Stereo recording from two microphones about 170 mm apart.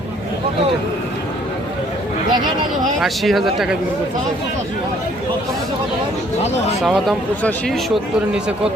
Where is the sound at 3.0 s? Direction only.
Centre (ahead or behind).